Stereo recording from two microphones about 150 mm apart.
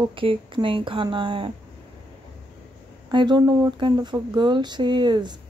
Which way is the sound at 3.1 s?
30° right (ahead or behind).